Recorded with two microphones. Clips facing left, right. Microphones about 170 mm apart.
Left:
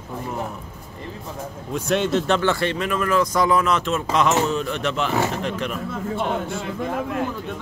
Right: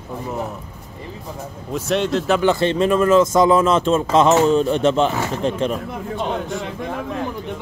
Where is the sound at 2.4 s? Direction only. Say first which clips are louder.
Right 5 dB; 25° right (ahead or behind).